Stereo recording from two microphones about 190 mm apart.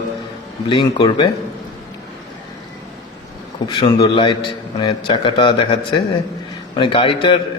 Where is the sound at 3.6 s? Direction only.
25° left (ahead or behind).